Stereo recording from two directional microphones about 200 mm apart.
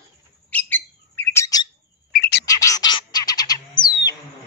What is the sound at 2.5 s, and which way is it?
Bird, 15° left (ahead or behind).